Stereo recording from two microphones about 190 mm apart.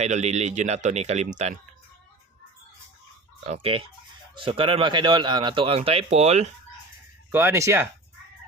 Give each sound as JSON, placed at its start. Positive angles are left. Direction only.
{"t": 0.0, "sound": "speech", "side_deg": -35}
{"t": 3.5, "sound": "speech", "side_deg": -30}
{"t": 7.3, "sound": "speech", "side_deg": -15}